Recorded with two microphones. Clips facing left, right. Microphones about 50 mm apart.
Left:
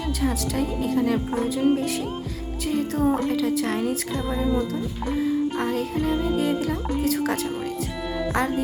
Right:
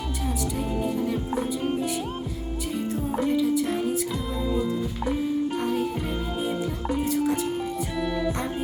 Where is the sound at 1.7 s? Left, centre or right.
Left.